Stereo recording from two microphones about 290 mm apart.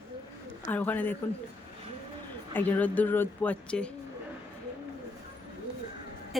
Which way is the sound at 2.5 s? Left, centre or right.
Centre.